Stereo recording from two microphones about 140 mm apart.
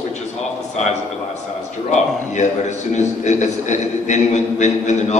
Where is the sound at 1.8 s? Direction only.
55° left (ahead or behind).